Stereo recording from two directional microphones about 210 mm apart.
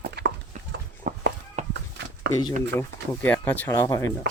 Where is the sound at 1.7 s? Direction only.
55° right (ahead or behind).